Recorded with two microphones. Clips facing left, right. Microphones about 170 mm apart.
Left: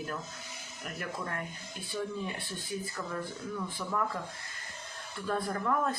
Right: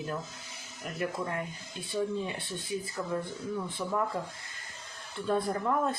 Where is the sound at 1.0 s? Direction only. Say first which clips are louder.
Right 5 dB; 20° right (ahead or behind).